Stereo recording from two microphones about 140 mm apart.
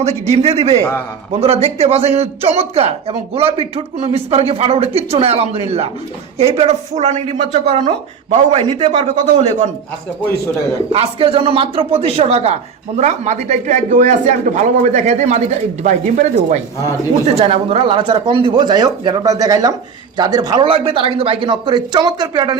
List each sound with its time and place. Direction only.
0.0 s a man's voice: 50° right (ahead or behind)
10.9 s a man's voice: 40° right (ahead or behind); by 16.6 s 60° right (ahead or behind)
17.3 s speech: 45° right (ahead or behind)